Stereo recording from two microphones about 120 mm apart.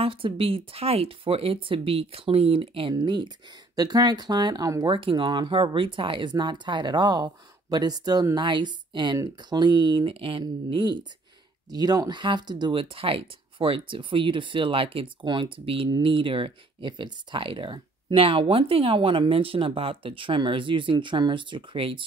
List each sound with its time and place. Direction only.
0.0 s speech: 50° right (ahead or behind)
2.9 s speech: 35° right (ahead or behind)
4.8 s speech: 45° right (ahead or behind)